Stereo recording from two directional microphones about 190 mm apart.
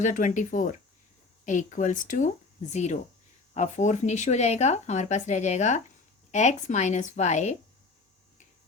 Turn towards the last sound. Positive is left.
turn(degrees=35)  # may be behind; listen again after turning